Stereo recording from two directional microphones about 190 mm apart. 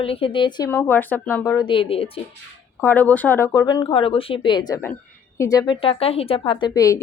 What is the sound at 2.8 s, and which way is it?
Speech, 10° left (ahead or behind).